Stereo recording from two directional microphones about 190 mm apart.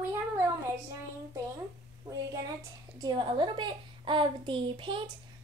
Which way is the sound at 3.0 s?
25° right (ahead or behind).